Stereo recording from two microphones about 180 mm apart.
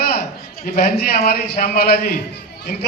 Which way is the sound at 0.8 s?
60° left (ahead or behind).